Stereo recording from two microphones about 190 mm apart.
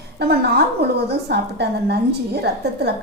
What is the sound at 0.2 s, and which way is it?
A woman's voice, 60° right (ahead or behind).